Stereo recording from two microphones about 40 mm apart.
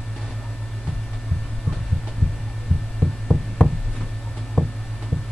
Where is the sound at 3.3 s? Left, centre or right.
Left.